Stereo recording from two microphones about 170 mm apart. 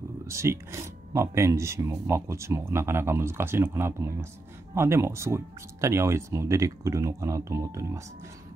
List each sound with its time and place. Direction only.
0.3 s speech: 15° right (ahead or behind)